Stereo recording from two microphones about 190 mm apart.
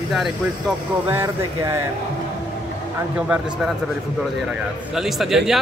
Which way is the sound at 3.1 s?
5° right (ahead or behind).